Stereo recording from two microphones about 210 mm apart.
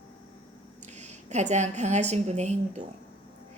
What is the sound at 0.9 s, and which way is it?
A woman's voice, 35° right (ahead or behind).